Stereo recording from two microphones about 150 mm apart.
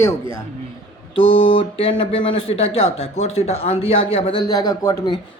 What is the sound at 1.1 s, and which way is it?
Speech, 40° left (ahead or behind).